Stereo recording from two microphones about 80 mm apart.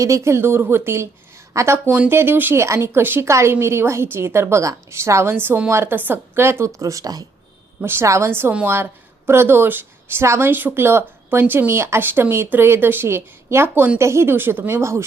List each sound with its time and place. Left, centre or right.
0.0 s speech: right
7.8 s a woman's voice: right